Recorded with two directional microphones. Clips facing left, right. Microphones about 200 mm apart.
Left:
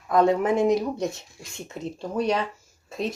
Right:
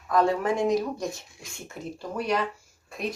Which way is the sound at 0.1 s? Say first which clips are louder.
Left 3 dB; 20° left (ahead or behind).